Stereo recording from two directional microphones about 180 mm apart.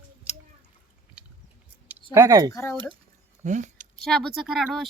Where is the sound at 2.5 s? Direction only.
15° left (ahead or behind).